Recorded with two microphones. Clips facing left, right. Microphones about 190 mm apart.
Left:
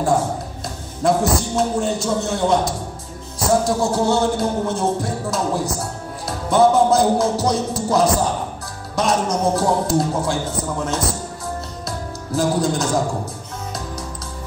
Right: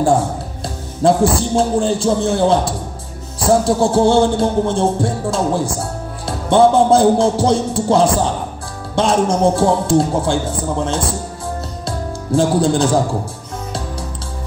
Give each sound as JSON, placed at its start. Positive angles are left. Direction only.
{"t": 1.0, "sound": "a man's voice", "side_deg": -30}
{"t": 11.8, "sound": "music", "side_deg": -30}